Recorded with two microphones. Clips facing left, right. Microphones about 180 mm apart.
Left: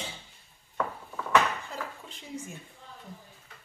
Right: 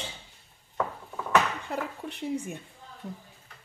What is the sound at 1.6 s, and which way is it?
Speech, 65° right (ahead or behind).